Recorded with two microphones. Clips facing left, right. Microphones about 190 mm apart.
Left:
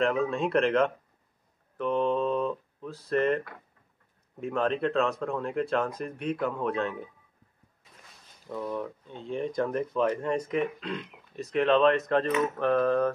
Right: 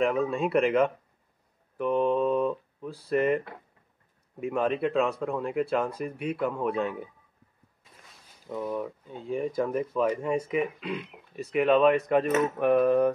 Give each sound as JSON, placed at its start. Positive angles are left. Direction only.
{"t": 0.0, "sound": "speech", "side_deg": -5}
{"t": 1.8, "sound": "a sound", "side_deg": -10}
{"t": 4.4, "sound": "speech", "side_deg": -10}
{"t": 8.6, "sound": "speech", "side_deg": -5}